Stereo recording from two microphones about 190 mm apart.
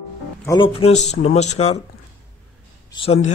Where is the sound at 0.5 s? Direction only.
30° left (ahead or behind).